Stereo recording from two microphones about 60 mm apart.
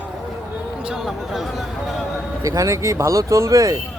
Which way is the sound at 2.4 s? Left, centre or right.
Right.